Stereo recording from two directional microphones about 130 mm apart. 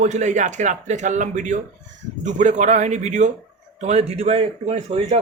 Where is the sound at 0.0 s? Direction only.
65° right (ahead or behind).